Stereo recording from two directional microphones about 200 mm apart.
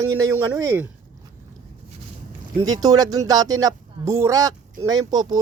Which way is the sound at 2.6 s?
20° right (ahead or behind).